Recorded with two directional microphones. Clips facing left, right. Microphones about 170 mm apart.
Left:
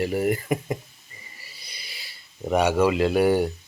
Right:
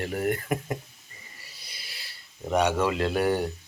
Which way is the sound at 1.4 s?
Centre (ahead or behind).